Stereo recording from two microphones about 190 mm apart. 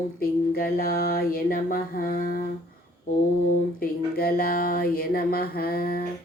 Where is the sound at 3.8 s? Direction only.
50° left (ahead or behind).